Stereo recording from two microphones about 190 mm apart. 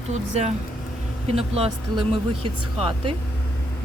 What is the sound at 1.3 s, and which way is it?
A woman's voice, 35° right (ahead or behind).